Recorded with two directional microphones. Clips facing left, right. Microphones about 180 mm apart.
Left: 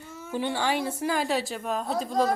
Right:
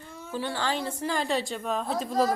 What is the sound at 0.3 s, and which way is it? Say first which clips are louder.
Speech: left 3 dB; 15° left (ahead or behind).